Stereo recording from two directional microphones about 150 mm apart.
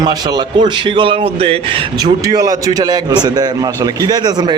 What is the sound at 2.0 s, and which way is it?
A man's voice, 25° right (ahead or behind).